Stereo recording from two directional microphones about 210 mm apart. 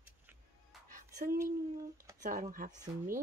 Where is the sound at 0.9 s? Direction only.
40° right (ahead or behind).